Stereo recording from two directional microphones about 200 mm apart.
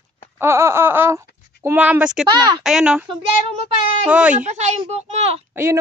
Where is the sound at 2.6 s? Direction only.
Centre (ahead or behind).